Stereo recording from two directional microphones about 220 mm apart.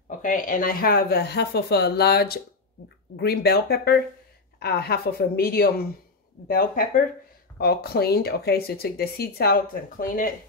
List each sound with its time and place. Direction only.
0.2 s speech: 40° left (ahead or behind)